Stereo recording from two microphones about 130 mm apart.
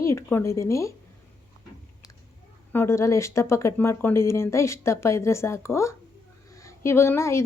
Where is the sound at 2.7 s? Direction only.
20° left (ahead or behind).